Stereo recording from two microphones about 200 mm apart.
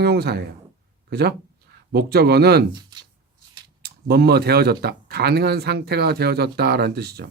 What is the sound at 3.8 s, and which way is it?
Speech, 50° right (ahead or behind).